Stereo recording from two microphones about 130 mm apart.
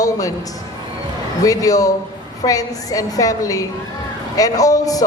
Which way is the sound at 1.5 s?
25° left (ahead or behind).